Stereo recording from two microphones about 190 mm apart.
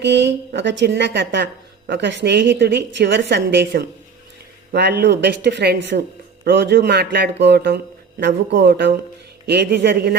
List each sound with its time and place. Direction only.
0.0 s a woman's voice: 65° right (ahead or behind)